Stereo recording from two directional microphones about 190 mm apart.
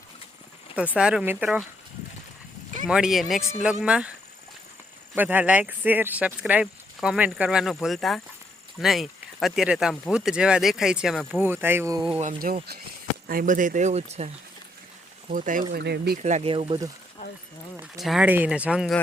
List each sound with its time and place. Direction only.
0.9 s speech: 5° right (ahead or behind)
2.8 s speech: 5° right (ahead or behind)
5.1 s speech: 10° right (ahead or behind)
11.3 s speech: 10° right (ahead or behind)
12.4 s speech: 45° right (ahead or behind)
15.3 s speech: 45° right (ahead or behind)
15.7 s speech: 55° right (ahead or behind)
16.2 s speech: 35° right (ahead or behind)
18.0 s speech: 5° right (ahead or behind)